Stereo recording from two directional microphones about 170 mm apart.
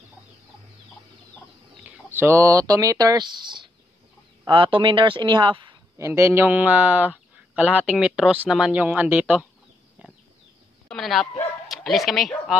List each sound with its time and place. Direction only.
1.9 s speech: 15° right (ahead or behind)
5.9 s speech: 15° right (ahead or behind)
10.9 s a man's voice: centre (ahead or behind)